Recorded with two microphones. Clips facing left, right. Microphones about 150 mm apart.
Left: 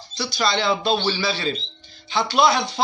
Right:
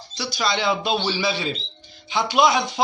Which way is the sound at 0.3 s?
10° right (ahead or behind).